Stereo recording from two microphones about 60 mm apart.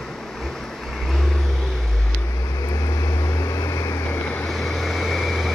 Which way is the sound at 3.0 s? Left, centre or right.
Left.